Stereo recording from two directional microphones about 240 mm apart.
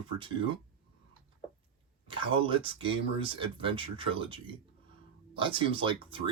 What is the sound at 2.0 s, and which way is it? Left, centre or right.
Speech, right.